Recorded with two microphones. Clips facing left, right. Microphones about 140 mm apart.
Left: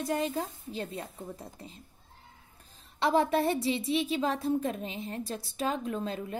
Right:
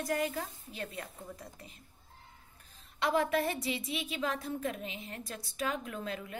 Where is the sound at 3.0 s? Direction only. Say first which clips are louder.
Left 4 dB; 30° left (ahead or behind).